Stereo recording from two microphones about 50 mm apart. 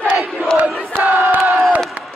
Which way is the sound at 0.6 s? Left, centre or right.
Right.